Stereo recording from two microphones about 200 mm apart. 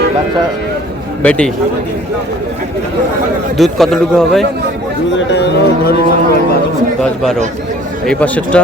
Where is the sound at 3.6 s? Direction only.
Centre (ahead or behind).